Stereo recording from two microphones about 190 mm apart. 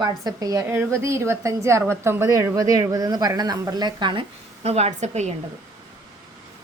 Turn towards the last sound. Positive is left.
turn(degrees=-35)  # may be behind; listen again after turning